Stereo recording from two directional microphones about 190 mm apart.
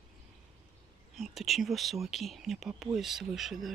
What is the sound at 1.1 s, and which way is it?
Speech, centre (ahead or behind).